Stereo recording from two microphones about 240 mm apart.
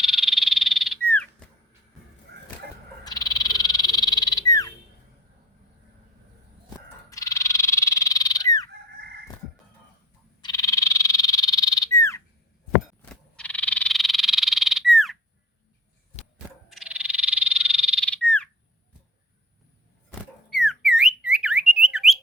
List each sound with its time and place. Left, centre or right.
0.0 s frog: centre
3.0 s frog: centre
7.1 s frog: centre
10.4 s frog: centre
16.6 s frog: centre
20.5 s a sound: centre